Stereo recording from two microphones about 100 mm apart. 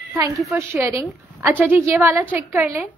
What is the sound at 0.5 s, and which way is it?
Speech, 30° right (ahead or behind).